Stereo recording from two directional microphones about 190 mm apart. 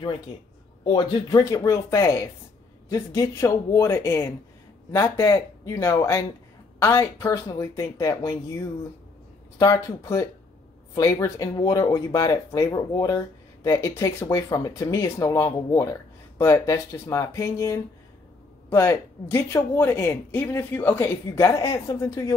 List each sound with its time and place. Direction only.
0.8 s speech: 20° left (ahead or behind)